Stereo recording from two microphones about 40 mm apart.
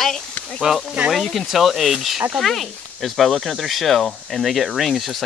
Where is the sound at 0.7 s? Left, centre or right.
Centre.